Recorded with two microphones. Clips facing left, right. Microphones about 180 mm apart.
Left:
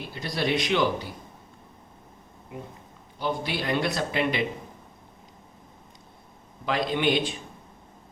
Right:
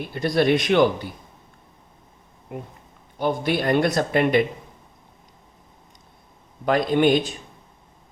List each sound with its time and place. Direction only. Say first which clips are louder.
0.1 s speech: right 8 dB; 55° right (ahead or behind)
2.5 s speech: right 4 dB; 55° right (ahead or behind)
6.7 s speech: right 7 dB; 50° right (ahead or behind)